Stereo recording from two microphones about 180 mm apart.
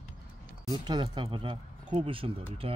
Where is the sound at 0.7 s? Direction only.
25° right (ahead or behind).